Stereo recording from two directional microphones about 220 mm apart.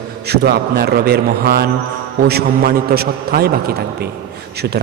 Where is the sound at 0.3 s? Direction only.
45° right (ahead or behind).